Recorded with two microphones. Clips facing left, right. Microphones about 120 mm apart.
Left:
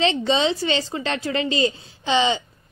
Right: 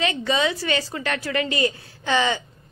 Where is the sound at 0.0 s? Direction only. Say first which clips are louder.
Left 3 dB; 25° left (ahead or behind).